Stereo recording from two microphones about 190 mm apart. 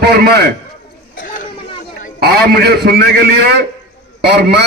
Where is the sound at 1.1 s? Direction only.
45° left (ahead or behind).